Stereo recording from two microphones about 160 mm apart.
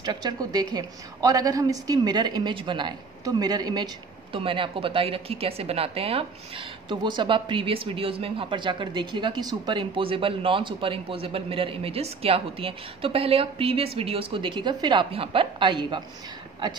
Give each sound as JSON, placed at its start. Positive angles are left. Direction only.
{"t": 0.0, "sound": "a woman's voice", "side_deg": -25}